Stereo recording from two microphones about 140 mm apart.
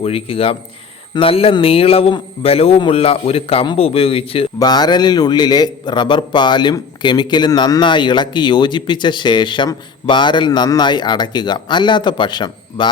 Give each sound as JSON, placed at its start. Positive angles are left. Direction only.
{"t": 0.0, "sound": "a man's voice", "side_deg": 45}
{"t": 4.6, "sound": "a man's voice", "side_deg": 30}